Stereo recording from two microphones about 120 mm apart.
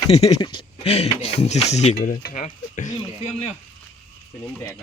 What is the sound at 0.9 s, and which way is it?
Speech, 70° left (ahead or behind).